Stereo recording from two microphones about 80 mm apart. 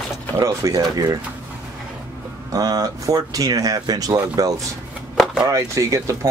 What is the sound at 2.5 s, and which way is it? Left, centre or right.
Speech, right.